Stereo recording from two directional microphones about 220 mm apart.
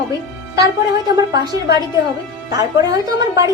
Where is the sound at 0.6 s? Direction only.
15° right (ahead or behind).